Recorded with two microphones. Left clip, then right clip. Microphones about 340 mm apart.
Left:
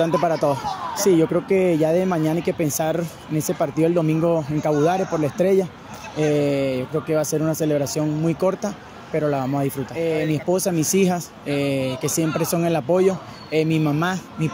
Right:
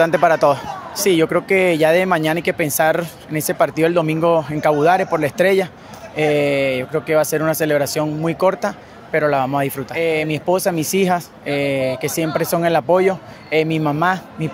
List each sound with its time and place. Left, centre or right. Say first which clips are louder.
0.0 s speech: right 6 dB; right